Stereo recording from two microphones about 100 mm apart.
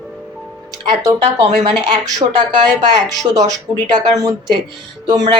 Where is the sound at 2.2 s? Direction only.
65° right (ahead or behind).